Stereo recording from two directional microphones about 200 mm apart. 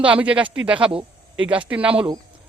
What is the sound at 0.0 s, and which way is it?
Speech, 5° right (ahead or behind).